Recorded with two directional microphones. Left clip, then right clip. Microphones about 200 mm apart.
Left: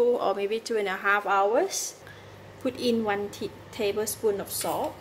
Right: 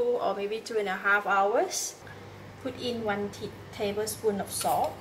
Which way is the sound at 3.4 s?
55° left (ahead or behind).